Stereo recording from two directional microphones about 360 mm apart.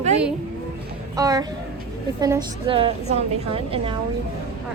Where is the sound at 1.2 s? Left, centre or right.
Centre.